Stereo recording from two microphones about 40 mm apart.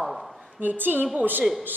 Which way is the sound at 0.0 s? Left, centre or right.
Centre.